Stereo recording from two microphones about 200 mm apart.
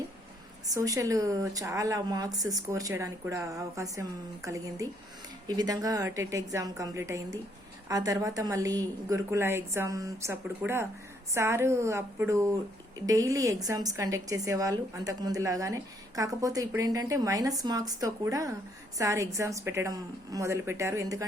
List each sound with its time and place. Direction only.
0.7 s a woman's voice: 15° right (ahead or behind)